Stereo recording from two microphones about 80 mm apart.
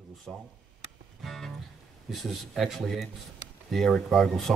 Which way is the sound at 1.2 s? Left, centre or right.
Centre.